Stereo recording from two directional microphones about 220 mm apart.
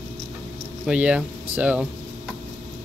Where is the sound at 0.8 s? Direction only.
5° right (ahead or behind).